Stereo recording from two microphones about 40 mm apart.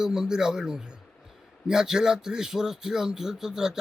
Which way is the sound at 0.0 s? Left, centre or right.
Centre.